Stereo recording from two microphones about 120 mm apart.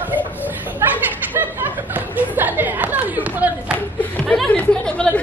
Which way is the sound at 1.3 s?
15° right (ahead or behind).